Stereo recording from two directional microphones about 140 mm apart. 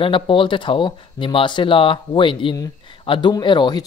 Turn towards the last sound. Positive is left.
turn(degrees=35)  # may be behind; listen again after turning